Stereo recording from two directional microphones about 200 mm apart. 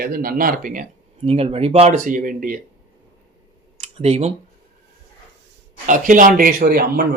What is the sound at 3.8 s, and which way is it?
Computer keyboard, 30° right (ahead or behind).